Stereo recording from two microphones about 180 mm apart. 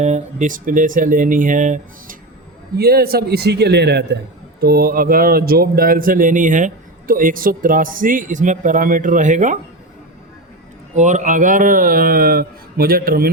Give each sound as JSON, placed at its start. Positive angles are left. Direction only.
{"t": 0.0, "sound": "speech", "side_deg": -40}
{"t": 2.7, "sound": "a man's voice", "side_deg": -60}
{"t": 4.6, "sound": "speech", "side_deg": -55}
{"t": 10.9, "sound": "speech", "side_deg": -40}